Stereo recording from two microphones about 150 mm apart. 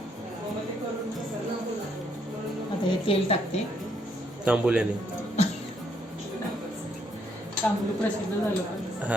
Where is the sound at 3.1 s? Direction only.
40° left (ahead or behind).